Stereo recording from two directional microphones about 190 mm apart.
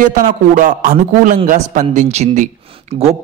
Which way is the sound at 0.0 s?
45° right (ahead or behind).